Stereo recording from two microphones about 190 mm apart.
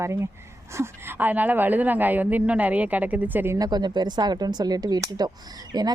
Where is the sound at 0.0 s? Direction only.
15° right (ahead or behind).